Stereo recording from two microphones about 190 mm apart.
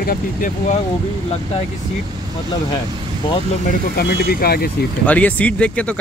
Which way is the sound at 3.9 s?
55° left (ahead or behind).